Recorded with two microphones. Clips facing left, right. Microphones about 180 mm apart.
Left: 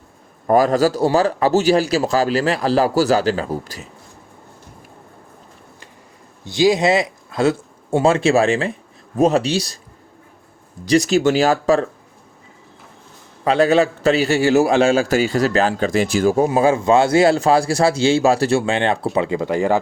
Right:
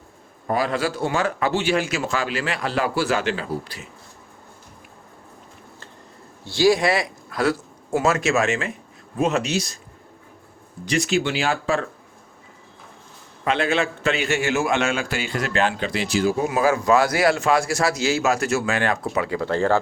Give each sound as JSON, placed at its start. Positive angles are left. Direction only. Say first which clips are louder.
{"t": 0.4, "sound": "a man's voice", "louder": "left 8 dB", "side_deg": 45}
{"t": 6.4, "sound": "a man's voice", "louder": "left 3 dB", "side_deg": 20}
{"t": 10.8, "sound": "a man's voice", "louder": "left 7 dB", "side_deg": 40}
{"t": 13.4, "sound": "a man's voice", "louder": "left 7 dB", "side_deg": 35}
{"t": 16.5, "sound": "a man's voice", "louder": "left 4 dB", "side_deg": 30}